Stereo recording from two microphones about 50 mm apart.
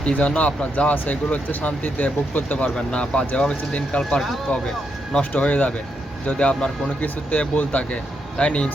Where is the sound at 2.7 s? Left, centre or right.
Centre.